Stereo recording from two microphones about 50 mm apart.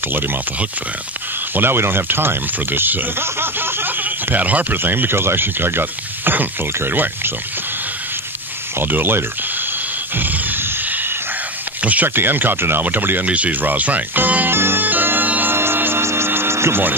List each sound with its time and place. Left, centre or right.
1.5 s speech: right
4.0 s speech: right
4.7 s speech: right
8.7 s speech: right
10.1 s a sound: right
11.8 s speech: right
12.2 s speech: right
14.6 s music: right
15.5 s music: right